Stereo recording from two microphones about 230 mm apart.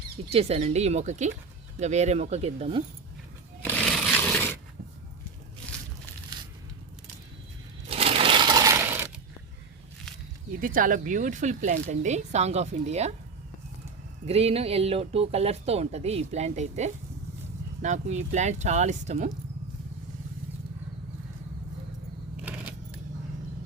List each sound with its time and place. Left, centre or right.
0.3 s speech: right
3.6 s a sound: centre
7.9 s sewing machine: right; by 9.0 s centre
10.6 s speech: right
14.3 s speech: right